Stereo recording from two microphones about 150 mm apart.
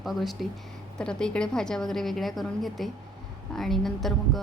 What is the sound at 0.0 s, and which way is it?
A woman's voice, centre (ahead or behind).